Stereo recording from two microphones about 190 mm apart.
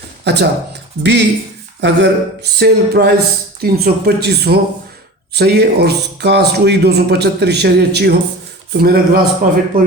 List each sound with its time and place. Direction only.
0.3 s a man's voice: 65° right (ahead or behind); by 9.9 s 45° right (ahead or behind)